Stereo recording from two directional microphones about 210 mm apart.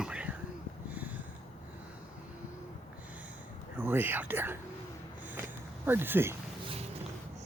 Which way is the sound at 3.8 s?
10° right (ahead or behind).